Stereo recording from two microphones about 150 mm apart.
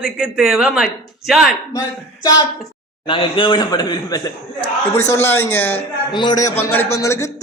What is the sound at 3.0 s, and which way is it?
A man's voice, 35° left (ahead or behind).